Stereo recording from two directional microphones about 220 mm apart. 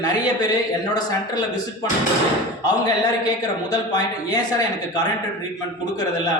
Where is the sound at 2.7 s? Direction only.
15° left (ahead or behind).